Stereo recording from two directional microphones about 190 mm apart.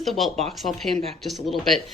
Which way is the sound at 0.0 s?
Centre (ahead or behind).